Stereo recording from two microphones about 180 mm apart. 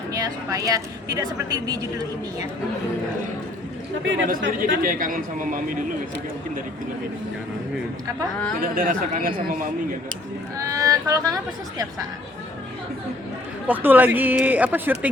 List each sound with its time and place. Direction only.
0.1 s a woman's voice: 20° right (ahead or behind)
4.0 s speech: 90° right
4.3 s speech: 50° right (ahead or behind)
8.6 s speech: 50° right (ahead or behind)
10.6 s a woman's voice: 20° right (ahead or behind)
13.7 s speech: 10° right (ahead or behind)